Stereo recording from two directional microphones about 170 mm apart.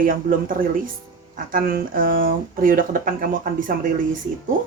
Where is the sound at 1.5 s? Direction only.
55° right (ahead or behind).